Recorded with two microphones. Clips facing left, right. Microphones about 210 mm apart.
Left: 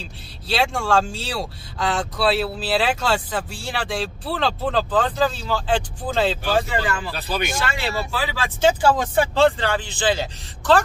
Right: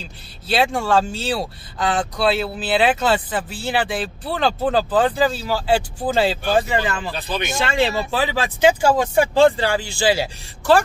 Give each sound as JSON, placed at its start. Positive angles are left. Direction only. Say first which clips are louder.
{"t": 0.5, "sound": "speech", "louder": "right 2 dB", "side_deg": 0}
{"t": 6.5, "sound": "speech", "louder": "right 2 dB", "side_deg": -20}